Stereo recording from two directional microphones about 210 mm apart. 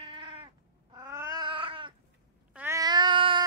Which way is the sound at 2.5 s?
10° right (ahead or behind).